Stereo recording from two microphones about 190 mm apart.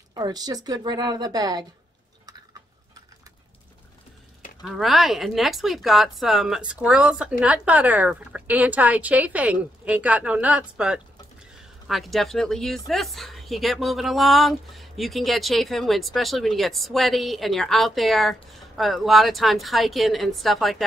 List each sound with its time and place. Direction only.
0.1 s a woman's voice: 20° right (ahead or behind)
4.6 s a woman's voice: centre (ahead or behind)